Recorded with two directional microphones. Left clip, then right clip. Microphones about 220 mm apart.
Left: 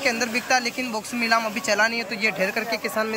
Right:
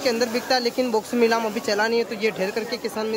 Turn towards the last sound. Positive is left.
turn(degrees=-5)  # may be behind; listen again after turning